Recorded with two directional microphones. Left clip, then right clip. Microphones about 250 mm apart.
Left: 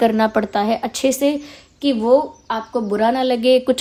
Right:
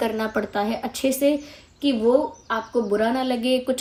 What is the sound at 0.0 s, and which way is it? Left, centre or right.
Speech, left.